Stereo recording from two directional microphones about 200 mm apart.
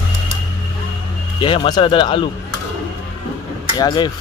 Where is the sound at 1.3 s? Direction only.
25° left (ahead or behind).